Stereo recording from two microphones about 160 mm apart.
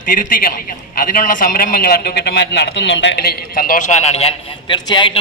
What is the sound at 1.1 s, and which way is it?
A man's voice, 60° left (ahead or behind).